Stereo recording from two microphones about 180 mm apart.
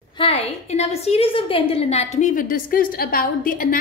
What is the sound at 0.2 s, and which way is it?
A woman's voice, 35° left (ahead or behind).